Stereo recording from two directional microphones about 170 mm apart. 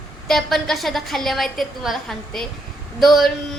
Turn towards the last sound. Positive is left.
turn(degrees=0)  # may be behind; listen again after turning